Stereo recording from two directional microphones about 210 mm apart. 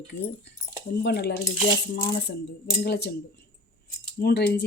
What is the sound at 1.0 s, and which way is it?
Speech, 50° left (ahead or behind).